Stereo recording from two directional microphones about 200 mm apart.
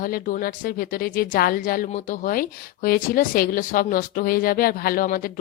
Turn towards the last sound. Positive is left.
turn(degrees=45)  # may be behind; listen again after turning